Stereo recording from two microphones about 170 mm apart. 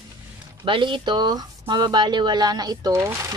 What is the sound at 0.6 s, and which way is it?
Speech, 30° right (ahead or behind).